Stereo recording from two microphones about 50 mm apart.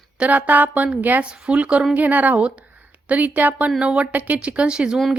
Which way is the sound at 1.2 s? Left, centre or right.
Right.